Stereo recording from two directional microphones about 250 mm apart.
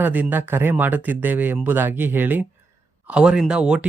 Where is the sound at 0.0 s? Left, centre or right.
Centre.